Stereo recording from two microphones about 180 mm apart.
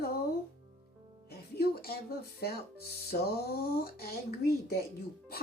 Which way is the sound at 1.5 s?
60° left (ahead or behind).